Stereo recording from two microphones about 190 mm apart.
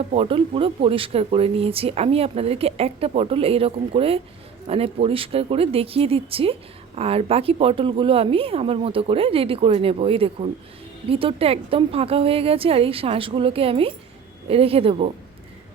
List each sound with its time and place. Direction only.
0.0 s speech: 30° right (ahead or behind)